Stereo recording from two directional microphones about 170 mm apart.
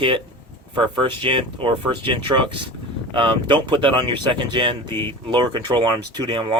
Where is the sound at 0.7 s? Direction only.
30° right (ahead or behind).